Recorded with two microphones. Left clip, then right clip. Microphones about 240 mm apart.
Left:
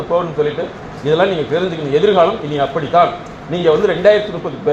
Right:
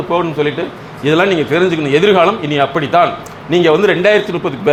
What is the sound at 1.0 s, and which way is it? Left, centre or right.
A man's voice, right.